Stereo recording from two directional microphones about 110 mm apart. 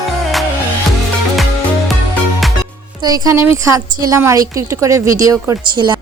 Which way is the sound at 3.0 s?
35° right (ahead or behind).